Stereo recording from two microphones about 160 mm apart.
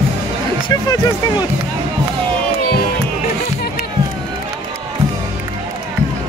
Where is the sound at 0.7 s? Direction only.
25° left (ahead or behind).